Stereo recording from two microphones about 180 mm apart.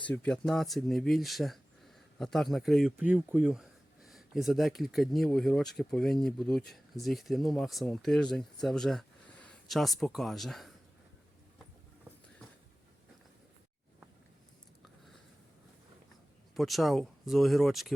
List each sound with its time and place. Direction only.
0.1 s speech: 5° left (ahead or behind)
16.6 s speech: centre (ahead or behind)